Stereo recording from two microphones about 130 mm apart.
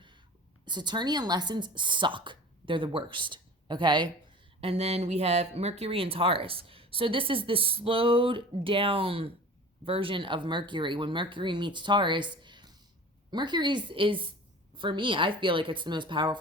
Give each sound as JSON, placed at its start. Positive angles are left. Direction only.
{"t": 0.6, "sound": "speech", "side_deg": -35}
{"t": 4.6, "sound": "speech", "side_deg": -55}